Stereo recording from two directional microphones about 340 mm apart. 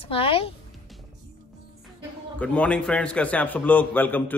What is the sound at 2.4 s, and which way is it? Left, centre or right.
A man's voice, centre.